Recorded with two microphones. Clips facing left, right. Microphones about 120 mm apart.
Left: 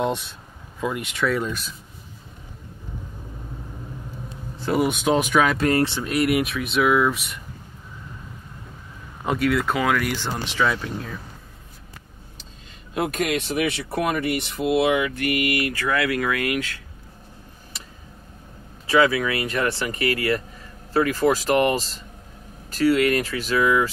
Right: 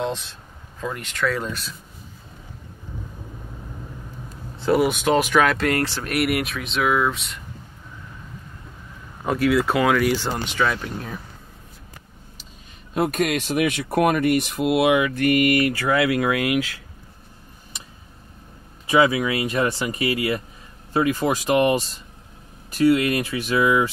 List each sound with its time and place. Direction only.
0.7 s speech: 15° left (ahead or behind)
4.6 s speech: centre (ahead or behind)
5.7 s speech: 25° left (ahead or behind)
6.2 s speech: centre (ahead or behind)
9.2 s speech: centre (ahead or behind)
12.9 s speech: 50° right (ahead or behind)
15.2 s mantra: 35° right (ahead or behind)
15.9 s speech: 20° right (ahead or behind)
18.9 s speech: 20° right (ahead or behind)
22.8 s speech: 15° right (ahead or behind)